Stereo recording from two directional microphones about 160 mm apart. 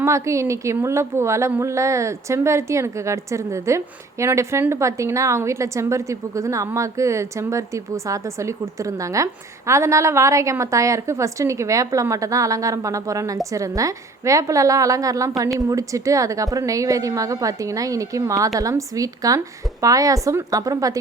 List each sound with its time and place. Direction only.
0.0 s a woman's voice: 20° right (ahead or behind)